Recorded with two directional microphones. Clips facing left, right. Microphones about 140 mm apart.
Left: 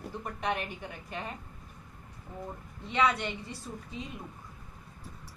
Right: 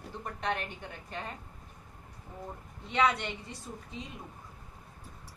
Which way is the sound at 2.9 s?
Centre (ahead or behind).